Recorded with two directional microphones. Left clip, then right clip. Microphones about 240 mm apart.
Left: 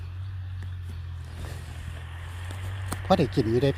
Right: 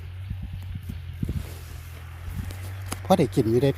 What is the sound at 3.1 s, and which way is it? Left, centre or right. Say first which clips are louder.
Speech: right 2 dB; right.